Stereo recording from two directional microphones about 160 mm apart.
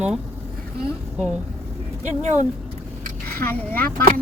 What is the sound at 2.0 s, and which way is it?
Speech, 50° right (ahead or behind).